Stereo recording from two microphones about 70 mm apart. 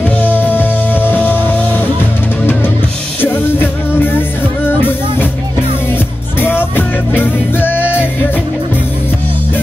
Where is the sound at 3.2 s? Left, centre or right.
Left.